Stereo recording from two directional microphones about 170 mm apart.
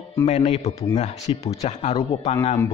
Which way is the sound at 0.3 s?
35° left (ahead or behind).